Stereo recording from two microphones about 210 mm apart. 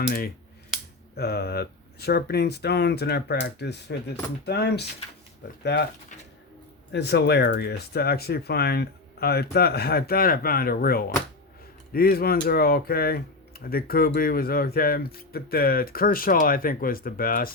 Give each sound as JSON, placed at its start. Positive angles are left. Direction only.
{"t": 1.1, "sound": "speech", "side_deg": 50}
{"t": 6.9, "sound": "speech", "side_deg": 55}